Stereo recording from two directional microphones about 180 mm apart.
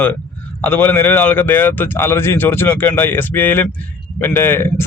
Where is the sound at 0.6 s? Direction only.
10° left (ahead or behind).